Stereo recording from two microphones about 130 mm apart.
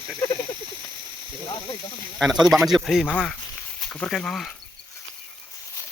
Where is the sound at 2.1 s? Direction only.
Centre (ahead or behind).